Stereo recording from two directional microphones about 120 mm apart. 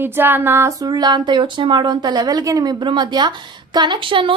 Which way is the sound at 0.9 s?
35° right (ahead or behind).